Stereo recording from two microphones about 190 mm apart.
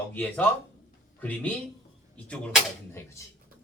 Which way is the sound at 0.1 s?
10° left (ahead or behind).